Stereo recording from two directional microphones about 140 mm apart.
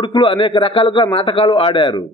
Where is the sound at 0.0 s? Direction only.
35° left (ahead or behind).